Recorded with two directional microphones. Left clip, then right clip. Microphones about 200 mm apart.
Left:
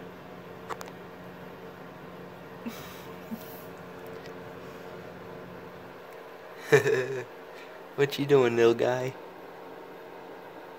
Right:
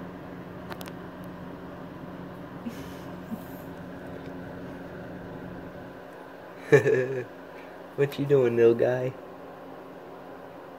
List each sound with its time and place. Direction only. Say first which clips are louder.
6.7 s a man's voice: right 2 dB; 5° left (ahead or behind)
8.0 s speech: even; 25° left (ahead or behind)
8.8 s speech: right 2 dB; 80° left